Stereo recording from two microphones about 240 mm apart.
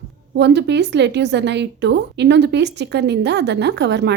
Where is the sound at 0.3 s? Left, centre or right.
Right.